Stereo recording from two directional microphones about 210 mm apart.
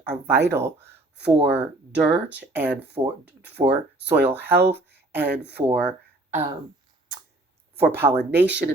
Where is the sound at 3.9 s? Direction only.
55° right (ahead or behind).